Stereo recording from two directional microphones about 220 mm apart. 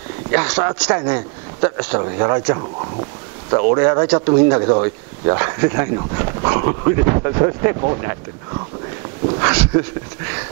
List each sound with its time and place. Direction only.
0.3 s speech: 10° right (ahead or behind)
9.4 s speech: 15° right (ahead or behind)